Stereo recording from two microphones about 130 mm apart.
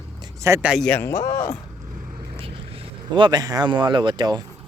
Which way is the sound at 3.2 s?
35° right (ahead or behind).